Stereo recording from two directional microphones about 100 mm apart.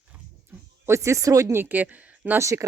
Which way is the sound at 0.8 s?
30° right (ahead or behind).